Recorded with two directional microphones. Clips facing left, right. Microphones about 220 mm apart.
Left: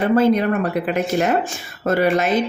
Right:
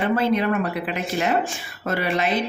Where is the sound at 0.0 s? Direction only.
40° left (ahead or behind).